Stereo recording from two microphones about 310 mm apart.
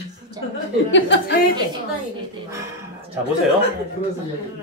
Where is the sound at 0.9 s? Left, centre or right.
Left.